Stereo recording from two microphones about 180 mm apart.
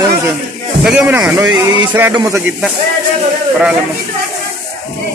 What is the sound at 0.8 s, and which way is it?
Speech, 5° right (ahead or behind).